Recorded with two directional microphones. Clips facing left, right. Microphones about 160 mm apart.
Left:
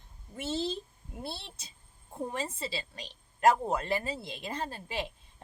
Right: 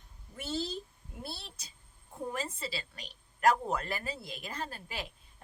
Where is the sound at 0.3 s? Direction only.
25° left (ahead or behind).